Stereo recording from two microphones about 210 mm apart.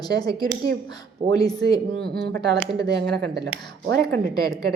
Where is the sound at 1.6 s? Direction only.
5° left (ahead or behind).